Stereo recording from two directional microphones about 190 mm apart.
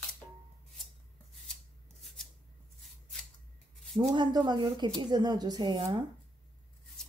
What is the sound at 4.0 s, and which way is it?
Speech, 20° right (ahead or behind).